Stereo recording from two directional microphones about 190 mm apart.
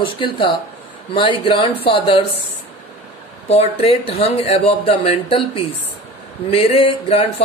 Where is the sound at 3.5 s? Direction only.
30° left (ahead or behind).